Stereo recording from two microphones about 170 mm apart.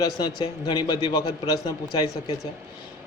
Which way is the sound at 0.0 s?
25° left (ahead or behind).